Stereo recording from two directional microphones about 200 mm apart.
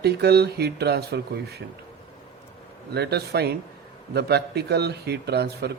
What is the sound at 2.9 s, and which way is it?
A man's voice, 55° right (ahead or behind).